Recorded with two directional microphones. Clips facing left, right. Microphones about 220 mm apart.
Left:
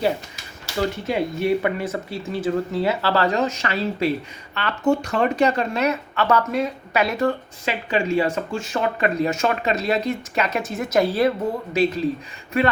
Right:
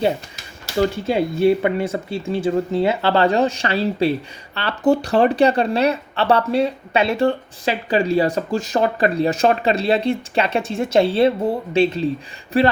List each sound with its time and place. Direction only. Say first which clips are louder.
0.8 s speech: right 4 dB; 30° right (ahead or behind)